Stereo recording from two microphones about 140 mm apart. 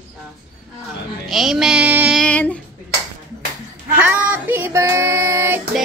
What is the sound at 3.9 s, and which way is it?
Child singing, 15° right (ahead or behind).